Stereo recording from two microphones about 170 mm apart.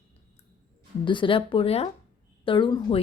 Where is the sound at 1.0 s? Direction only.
30° left (ahead or behind).